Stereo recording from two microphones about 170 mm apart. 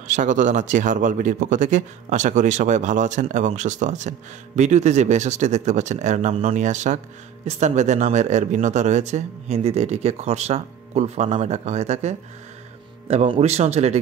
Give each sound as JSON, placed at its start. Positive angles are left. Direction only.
{"t": 0.0, "sound": "speech", "side_deg": -45}